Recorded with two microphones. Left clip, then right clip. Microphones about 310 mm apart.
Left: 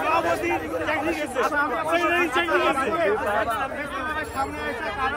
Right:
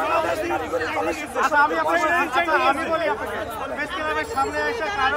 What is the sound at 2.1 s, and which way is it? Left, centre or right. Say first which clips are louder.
Speech: right 2 dB; right.